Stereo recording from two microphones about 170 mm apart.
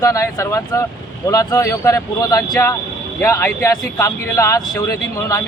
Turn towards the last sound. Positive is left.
turn(degrees=20)  # may be behind; listen again after turning